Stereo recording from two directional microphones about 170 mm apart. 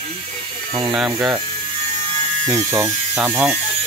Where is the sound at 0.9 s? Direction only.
5° right (ahead or behind).